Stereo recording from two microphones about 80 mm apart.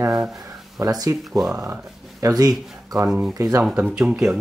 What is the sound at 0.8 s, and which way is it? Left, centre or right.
Speech, right.